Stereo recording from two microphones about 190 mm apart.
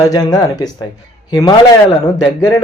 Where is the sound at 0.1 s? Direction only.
20° left (ahead or behind).